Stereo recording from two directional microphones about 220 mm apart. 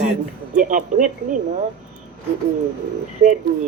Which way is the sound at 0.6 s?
40° right (ahead or behind).